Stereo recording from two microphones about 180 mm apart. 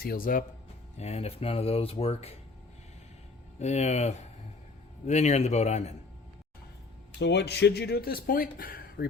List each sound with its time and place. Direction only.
0.0 s speech: 55° left (ahead or behind)
0.9 s speech: 35° left (ahead or behind)
3.6 s speech: 40° left (ahead or behind)
7.2 s speech: 70° left (ahead or behind); by 9.0 s 55° left (ahead or behind)